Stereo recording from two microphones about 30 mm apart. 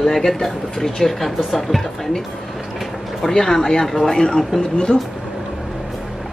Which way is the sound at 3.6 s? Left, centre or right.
Left.